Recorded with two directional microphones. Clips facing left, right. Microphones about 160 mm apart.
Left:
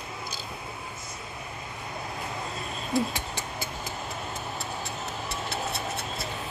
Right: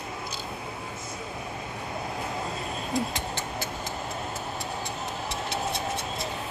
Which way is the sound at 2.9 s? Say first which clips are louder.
Left 3 dB; 10° left (ahead or behind).